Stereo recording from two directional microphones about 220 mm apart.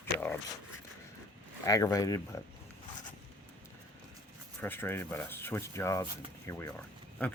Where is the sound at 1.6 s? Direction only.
15° left (ahead or behind).